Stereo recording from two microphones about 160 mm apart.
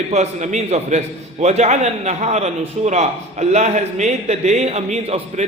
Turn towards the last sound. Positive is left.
turn(degrees=-40)  # may be behind; listen again after turning